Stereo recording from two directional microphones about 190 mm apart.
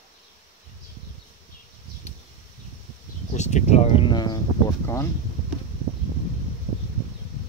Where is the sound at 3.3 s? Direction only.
40° left (ahead or behind); by 5.1 s 15° left (ahead or behind).